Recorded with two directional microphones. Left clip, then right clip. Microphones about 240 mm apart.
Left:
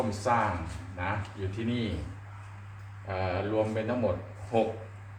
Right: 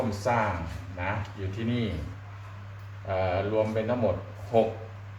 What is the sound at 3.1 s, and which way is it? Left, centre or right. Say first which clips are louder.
Speech: right 4 dB; centre.